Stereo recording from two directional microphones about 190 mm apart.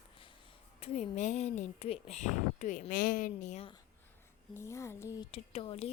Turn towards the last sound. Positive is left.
turn(degrees=30)  # may be behind; listen again after turning